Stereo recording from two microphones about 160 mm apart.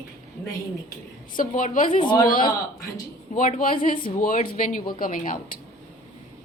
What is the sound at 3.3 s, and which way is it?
Speech, 55° left (ahead or behind).